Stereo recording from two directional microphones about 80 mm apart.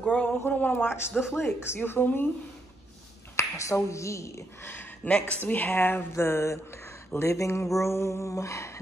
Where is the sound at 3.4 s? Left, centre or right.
Left.